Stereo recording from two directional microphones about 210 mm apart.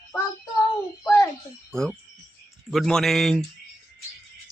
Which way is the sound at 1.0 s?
10° left (ahead or behind).